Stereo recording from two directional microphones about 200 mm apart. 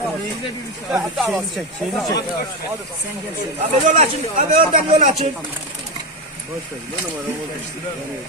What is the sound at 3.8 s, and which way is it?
Speech, 35° right (ahead or behind).